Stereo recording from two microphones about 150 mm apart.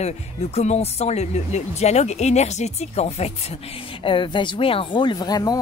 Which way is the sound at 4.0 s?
35° left (ahead or behind).